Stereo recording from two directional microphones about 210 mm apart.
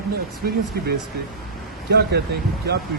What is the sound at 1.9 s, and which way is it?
Speech, 50° right (ahead or behind).